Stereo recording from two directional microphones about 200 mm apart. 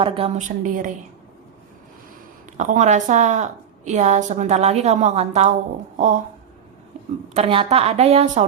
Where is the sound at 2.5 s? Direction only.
35° right (ahead or behind).